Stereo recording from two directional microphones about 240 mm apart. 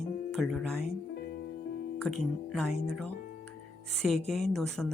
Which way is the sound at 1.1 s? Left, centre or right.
Left.